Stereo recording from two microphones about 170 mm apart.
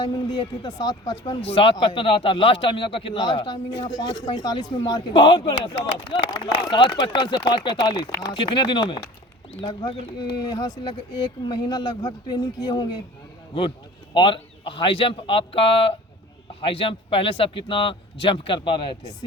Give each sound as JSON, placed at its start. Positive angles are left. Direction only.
{"t": 0.0, "sound": "a man's voice", "side_deg": 25}